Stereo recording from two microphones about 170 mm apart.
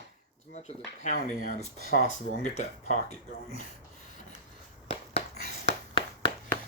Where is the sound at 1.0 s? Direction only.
50° left (ahead or behind).